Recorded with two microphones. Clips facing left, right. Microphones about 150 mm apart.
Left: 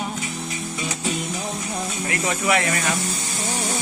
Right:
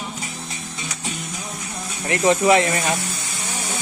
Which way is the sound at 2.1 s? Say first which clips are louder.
Right 7 dB; 25° right (ahead or behind).